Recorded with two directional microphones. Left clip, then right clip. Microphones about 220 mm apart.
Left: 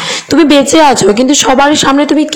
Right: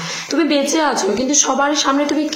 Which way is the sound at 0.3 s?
35° left (ahead or behind).